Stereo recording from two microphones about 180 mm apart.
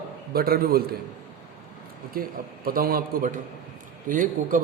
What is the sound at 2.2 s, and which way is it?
A man's voice, 55° right (ahead or behind).